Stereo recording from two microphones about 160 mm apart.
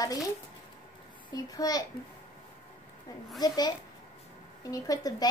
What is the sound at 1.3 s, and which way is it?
Speech, 25° left (ahead or behind).